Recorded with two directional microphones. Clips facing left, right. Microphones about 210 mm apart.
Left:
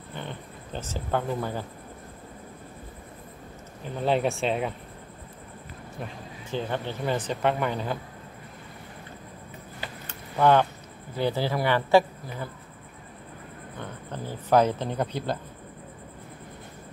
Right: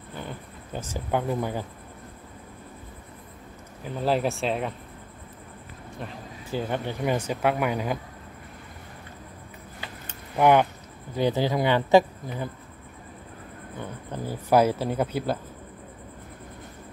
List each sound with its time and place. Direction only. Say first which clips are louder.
0.7 s speech: right 1 dB; 10° right (ahead or behind)
3.8 s speech: even; centre (ahead or behind)
5.9 s a sound: right 1 dB; centre (ahead or behind)
6.7 s speech: right 3 dB; 15° right (ahead or behind)
10.0 s keys jangling: right 1 dB; 15° right (ahead or behind)
11.1 s speech: right 3 dB; 15° right (ahead or behind)
13.7 s speech: right 2 dB; 10° right (ahead or behind)